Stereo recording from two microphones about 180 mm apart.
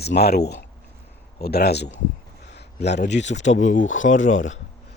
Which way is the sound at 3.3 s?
40° left (ahead or behind).